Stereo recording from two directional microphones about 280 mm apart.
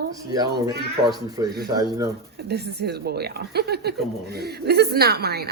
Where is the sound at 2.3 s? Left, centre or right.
Right.